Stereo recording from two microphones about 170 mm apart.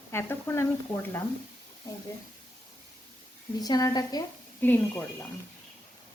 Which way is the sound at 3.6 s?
20° left (ahead or behind).